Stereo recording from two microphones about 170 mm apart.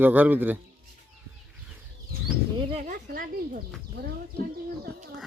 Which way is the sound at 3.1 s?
55° right (ahead or behind).